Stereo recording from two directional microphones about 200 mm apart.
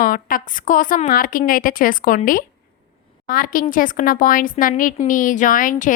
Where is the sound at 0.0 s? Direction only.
45° left (ahead or behind).